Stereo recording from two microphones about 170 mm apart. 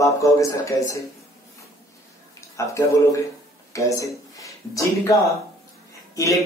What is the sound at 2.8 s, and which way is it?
Speech, 20° left (ahead or behind).